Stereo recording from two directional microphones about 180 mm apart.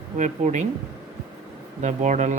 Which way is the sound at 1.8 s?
40° right (ahead or behind).